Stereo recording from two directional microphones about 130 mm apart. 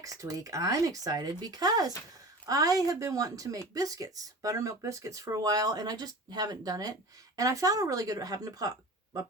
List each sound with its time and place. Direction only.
0.0 s speech: 25° right (ahead or behind)